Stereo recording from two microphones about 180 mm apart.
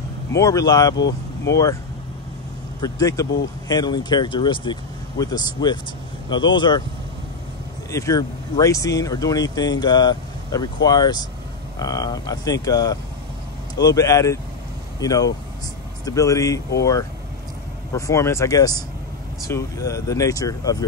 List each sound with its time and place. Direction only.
0.3 s speech: 20° left (ahead or behind)
0.9 s speech: 75° left (ahead or behind)
1.5 s speech: 20° left (ahead or behind)
2.8 s speech: 20° left (ahead or behind)
7.9 s speech: 20° left (ahead or behind)
17.9 s speech: 15° left (ahead or behind)